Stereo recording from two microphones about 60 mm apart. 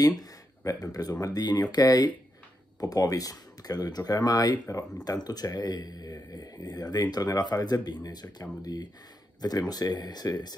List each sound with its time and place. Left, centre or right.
0.2 s a sound: left
1.2 s speech: left
2.8 s speech: left
5.0 s speech: left